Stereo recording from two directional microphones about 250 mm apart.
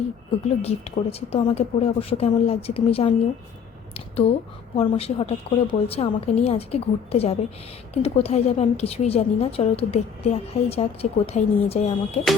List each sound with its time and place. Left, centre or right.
0.4 s a woman's voice: left
3.9 s a sound: left
4.8 s a woman's voice: left